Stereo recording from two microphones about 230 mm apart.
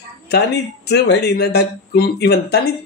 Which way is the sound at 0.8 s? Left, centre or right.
Left.